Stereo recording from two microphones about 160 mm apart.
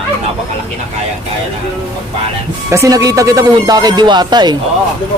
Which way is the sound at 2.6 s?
20° right (ahead or behind).